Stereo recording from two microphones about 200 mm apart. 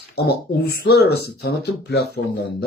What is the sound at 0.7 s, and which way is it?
Speech, 50° left (ahead or behind).